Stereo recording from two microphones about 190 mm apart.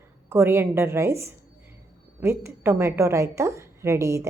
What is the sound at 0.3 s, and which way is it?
A woman's voice, 10° right (ahead or behind).